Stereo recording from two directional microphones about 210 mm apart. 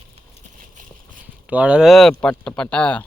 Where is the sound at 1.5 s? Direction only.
5° right (ahead or behind).